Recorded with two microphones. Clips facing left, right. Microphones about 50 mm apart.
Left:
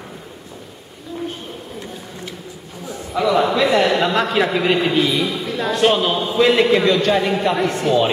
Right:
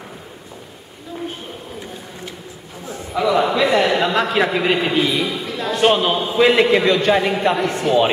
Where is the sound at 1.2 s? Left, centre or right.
Centre.